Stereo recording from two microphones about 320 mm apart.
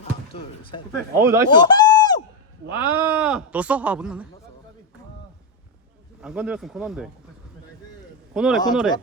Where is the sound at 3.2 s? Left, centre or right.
Centre.